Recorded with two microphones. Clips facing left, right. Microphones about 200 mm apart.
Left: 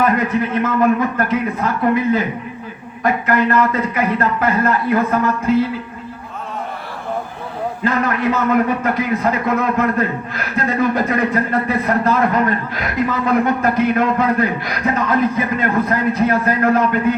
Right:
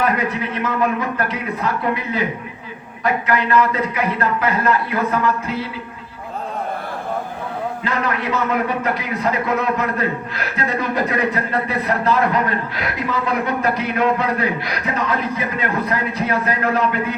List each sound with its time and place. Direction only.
0.0 s a man's voice: 50° left (ahead or behind)
7.9 s a man's voice: 50° left (ahead or behind)